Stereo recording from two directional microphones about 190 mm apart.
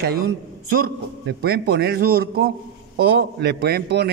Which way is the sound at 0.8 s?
55° right (ahead or behind).